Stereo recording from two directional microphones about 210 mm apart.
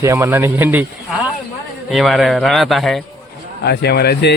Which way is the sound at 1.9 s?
Centre (ahead or behind).